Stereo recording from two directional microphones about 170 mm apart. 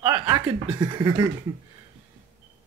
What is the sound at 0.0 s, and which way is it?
Speech, 25° right (ahead or behind).